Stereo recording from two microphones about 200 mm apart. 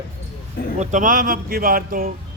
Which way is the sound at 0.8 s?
40° right (ahead or behind).